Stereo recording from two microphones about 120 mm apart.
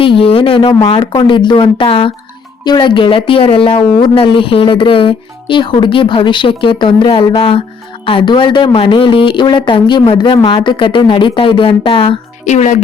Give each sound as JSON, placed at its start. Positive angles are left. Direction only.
{"t": 0.0, "sound": "speech", "side_deg": 50}
{"t": 12.5, "sound": "speech", "side_deg": 75}